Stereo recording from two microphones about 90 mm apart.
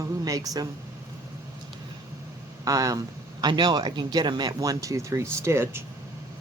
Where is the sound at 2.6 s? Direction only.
40° right (ahead or behind).